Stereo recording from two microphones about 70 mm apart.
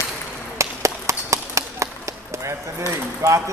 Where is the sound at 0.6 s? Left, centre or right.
Right.